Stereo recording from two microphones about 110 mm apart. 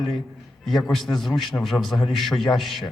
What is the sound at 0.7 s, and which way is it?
Speech, 5° left (ahead or behind).